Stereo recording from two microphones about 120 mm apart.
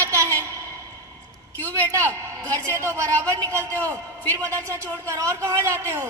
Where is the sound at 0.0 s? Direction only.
25° right (ahead or behind).